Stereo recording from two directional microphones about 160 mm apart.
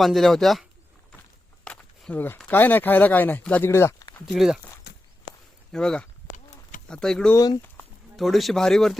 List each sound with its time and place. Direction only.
0.0 s speech: centre (ahead or behind)
1.6 s speech: 10° left (ahead or behind)
4.3 s speech: centre (ahead or behind)
4.9 s walk: 90° left
5.7 s speech: 5° left (ahead or behind)
6.3 s a sound: 55° left (ahead or behind)
6.9 s speech: 5° left (ahead or behind)
7.3 s speech: 20° left (ahead or behind)
8.1 s speech: centre (ahead or behind)